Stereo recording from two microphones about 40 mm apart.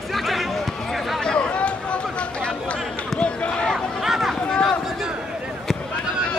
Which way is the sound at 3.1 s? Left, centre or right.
Left.